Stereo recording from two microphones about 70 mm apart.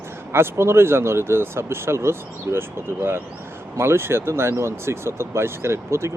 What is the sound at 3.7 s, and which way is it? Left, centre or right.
Speech, right.